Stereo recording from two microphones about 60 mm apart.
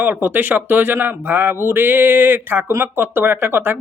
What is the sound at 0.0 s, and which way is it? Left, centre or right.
A man's voice, right.